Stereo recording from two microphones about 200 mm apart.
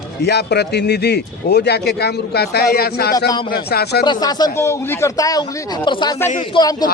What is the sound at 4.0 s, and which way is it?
Speech, 20° left (ahead or behind).